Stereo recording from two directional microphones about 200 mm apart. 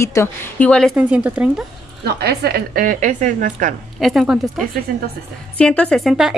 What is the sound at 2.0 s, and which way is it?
A woman's voice, 55° right (ahead or behind).